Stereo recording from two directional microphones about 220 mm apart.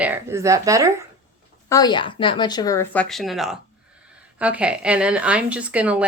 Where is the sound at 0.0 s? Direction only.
10° right (ahead or behind).